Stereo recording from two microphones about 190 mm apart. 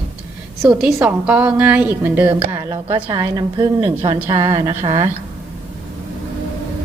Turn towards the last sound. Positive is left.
turn(degrees=-15)  # may be behind; listen again after turning